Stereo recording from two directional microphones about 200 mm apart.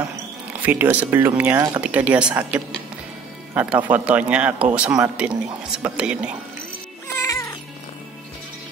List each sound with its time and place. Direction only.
0.5 s speech: 10° right (ahead or behind)
7.2 s cat: 15° left (ahead or behind)